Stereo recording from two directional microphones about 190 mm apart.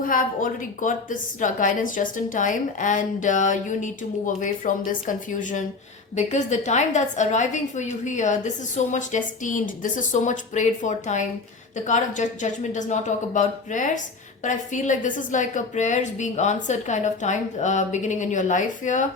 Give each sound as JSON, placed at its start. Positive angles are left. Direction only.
{"t": 0.0, "sound": "a woman's voice", "side_deg": 45}